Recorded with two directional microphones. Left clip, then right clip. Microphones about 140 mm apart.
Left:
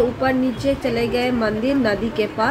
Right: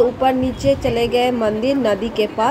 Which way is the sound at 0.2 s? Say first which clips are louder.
Right 3 dB; 25° right (ahead or behind).